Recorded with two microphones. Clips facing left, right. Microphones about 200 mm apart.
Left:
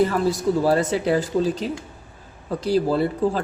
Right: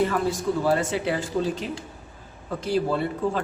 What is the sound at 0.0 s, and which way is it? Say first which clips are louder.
A woman's voice: left 4 dB; 40° left (ahead or behind).